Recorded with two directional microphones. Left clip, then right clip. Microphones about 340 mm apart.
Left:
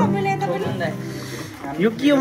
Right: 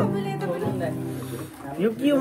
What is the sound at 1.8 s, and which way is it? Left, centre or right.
Speech, centre.